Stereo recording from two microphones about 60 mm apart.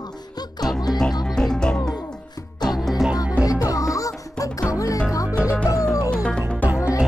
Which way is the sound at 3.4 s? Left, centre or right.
Left.